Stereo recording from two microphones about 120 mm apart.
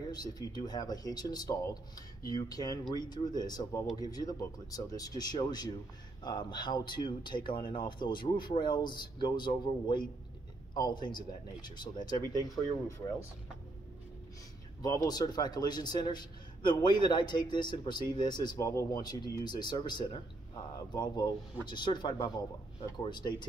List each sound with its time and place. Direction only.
0.1 s speech: 35° left (ahead or behind)
14.8 s speech: 35° left (ahead or behind)